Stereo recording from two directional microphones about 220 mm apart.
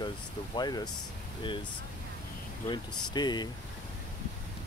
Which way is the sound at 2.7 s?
20° left (ahead or behind).